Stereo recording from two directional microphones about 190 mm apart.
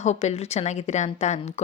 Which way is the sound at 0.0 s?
35° left (ahead or behind).